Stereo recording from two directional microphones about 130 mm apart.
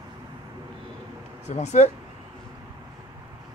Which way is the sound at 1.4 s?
60° left (ahead or behind).